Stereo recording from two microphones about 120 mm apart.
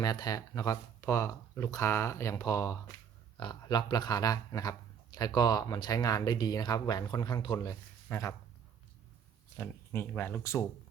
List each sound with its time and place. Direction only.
0.0 s speech: 35° left (ahead or behind)
3.3 s speech: 40° left (ahead or behind); by 8.4 s 25° left (ahead or behind)
9.6 s speech: 20° left (ahead or behind)